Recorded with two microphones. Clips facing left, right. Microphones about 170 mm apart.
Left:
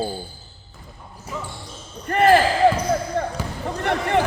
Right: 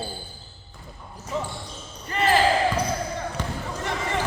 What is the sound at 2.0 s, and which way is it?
Speech, 55° left (ahead or behind).